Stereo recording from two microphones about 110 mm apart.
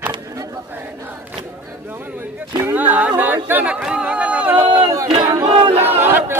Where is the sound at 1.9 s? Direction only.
20° right (ahead or behind).